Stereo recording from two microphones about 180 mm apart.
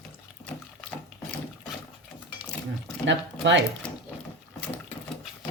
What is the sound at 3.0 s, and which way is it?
Speech, 85° right.